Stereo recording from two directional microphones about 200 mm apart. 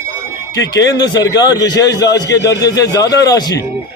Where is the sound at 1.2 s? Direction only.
20° left (ahead or behind).